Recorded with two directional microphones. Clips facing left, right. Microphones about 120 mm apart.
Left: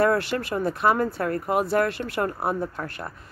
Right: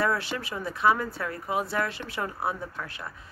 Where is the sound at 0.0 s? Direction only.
55° left (ahead or behind).